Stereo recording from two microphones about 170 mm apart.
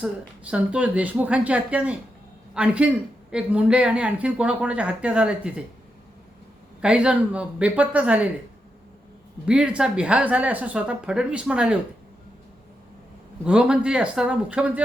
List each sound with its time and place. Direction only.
0.0 s speech: 5° right (ahead or behind)
6.8 s speech: 5° right (ahead or behind)
9.5 s speech: 5° right (ahead or behind)
13.4 s speech: 5° right (ahead or behind)